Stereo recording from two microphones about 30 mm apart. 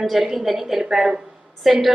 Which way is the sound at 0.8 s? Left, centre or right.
Centre.